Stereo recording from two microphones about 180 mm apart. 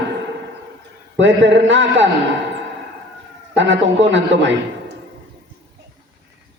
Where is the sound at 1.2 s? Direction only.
90° right.